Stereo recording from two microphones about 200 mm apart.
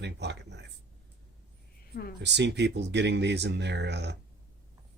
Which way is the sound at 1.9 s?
50° left (ahead or behind).